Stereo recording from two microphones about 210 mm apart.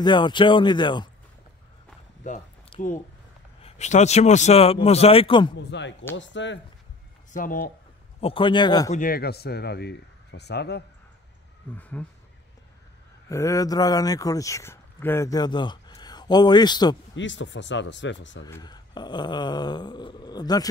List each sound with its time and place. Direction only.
0.0 s speech: 20° left (ahead or behind)
2.2 s a sound: 35° left (ahead or behind)
3.6 s speech: 30° left (ahead or behind)
5.6 s speech: 55° left (ahead or behind)
7.3 s speech: 45° left (ahead or behind)
8.2 s speech: 25° left (ahead or behind)
8.9 s speech: 45° left (ahead or behind)
11.7 s speech: 5° left (ahead or behind)
13.3 s speech: 15° left (ahead or behind)
17.1 s speech: 60° left (ahead or behind)
18.4 s speech: 20° left (ahead or behind)